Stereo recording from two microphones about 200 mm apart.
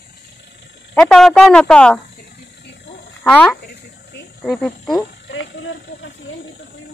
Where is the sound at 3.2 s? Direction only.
5° left (ahead or behind).